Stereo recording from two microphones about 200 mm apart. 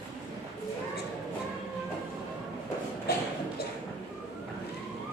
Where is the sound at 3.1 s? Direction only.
50° left (ahead or behind).